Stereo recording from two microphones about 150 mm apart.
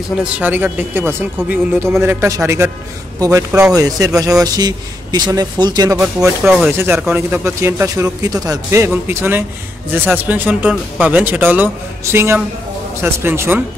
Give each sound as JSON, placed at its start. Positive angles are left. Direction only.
{"t": 0.2, "sound": "a man's voice", "side_deg": -10}
{"t": 5.9, "sound": "speech", "side_deg": -5}
{"t": 6.8, "sound": "speech", "side_deg": -15}